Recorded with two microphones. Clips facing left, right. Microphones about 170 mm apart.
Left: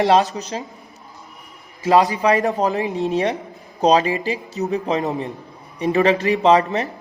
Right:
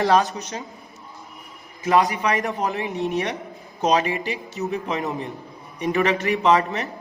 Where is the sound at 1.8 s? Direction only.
30° left (ahead or behind).